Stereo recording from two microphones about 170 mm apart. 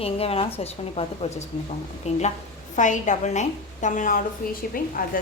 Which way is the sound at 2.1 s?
40° left (ahead or behind).